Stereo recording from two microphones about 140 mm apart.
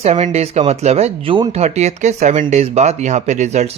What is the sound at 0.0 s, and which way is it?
Speech, 50° right (ahead or behind).